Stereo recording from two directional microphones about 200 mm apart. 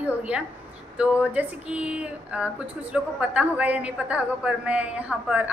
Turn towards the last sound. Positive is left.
turn(degrees=-5)  # may be behind; listen again after turning